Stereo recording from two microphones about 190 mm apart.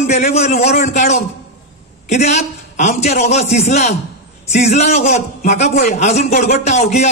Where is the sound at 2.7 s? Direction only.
35° left (ahead or behind).